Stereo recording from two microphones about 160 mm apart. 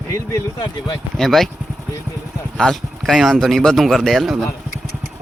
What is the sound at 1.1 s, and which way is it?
Speech, centre (ahead or behind).